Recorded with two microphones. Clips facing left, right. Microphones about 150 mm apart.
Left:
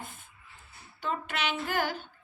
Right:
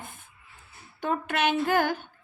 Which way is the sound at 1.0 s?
50° right (ahead or behind).